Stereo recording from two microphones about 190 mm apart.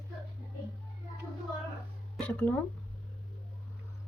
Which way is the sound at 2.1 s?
5° left (ahead or behind).